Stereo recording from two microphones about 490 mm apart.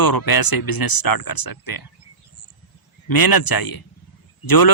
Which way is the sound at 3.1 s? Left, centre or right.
Left.